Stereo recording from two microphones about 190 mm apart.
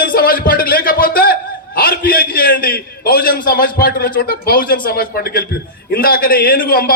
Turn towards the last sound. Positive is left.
turn(degrees=50)  # may be behind; listen again after turning